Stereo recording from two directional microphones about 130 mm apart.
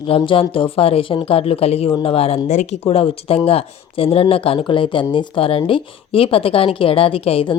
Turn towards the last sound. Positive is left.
turn(degrees=45)  # may be behind; listen again after turning